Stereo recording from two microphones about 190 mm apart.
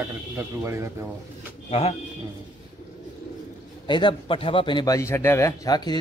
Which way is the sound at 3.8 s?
25° left (ahead or behind).